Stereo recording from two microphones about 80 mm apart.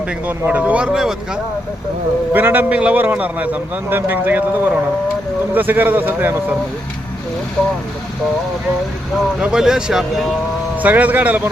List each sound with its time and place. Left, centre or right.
0.3 s speech: centre
2.3 s a man's voice: right
9.4 s speech: centre
10.8 s a man's voice: right